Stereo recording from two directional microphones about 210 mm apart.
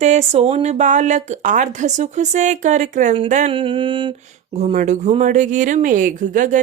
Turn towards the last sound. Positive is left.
turn(degrees=-40)  # may be behind; listen again after turning